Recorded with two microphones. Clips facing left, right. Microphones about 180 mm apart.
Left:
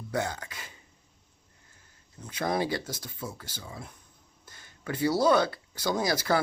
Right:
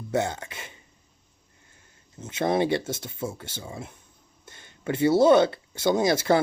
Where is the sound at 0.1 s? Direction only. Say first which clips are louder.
Right 5 dB; 25° right (ahead or behind).